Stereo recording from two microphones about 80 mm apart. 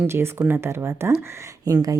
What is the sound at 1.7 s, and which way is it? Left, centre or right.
Speech, right.